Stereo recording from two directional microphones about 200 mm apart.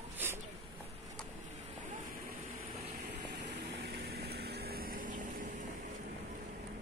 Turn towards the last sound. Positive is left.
turn(degrees=-45)  # may be behind; listen again after turning